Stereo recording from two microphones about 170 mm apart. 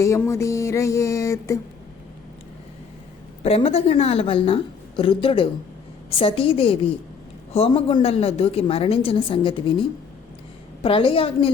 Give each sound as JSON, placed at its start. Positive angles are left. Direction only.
{"t": 0.0, "sound": "a sound", "side_deg": 15}
{"t": 3.4, "sound": "a woman's voice", "side_deg": 35}
{"t": 10.8, "sound": "a woman's voice", "side_deg": 30}